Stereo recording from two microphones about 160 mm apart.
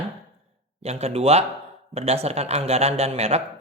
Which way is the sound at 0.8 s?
40° right (ahead or behind).